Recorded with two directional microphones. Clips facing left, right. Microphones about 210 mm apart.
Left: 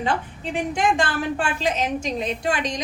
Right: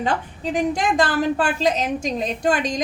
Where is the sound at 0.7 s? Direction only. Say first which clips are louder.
Right 2 dB; 35° right (ahead or behind).